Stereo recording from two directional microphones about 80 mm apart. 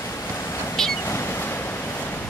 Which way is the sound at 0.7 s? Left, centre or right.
Centre.